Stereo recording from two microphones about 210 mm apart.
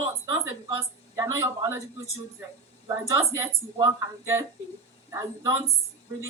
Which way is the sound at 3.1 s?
10° right (ahead or behind).